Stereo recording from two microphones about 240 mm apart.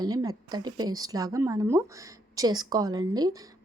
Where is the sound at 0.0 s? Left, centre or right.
Centre.